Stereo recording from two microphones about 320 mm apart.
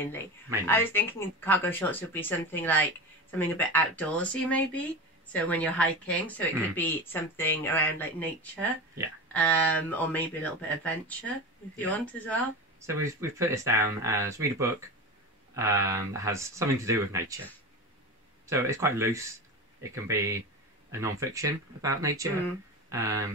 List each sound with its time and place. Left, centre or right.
0.7 s speech: centre
12.8 s speech: centre
18.5 s speech: centre